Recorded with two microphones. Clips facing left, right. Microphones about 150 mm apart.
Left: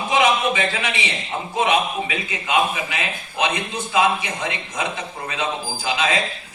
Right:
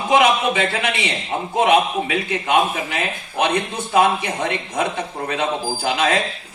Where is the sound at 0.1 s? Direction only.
55° right (ahead or behind).